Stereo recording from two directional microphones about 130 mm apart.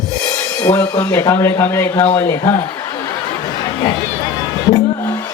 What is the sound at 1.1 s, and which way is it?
Speech, 25° left (ahead or behind).